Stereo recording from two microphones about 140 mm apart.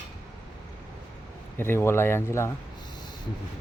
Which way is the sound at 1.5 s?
15° left (ahead or behind).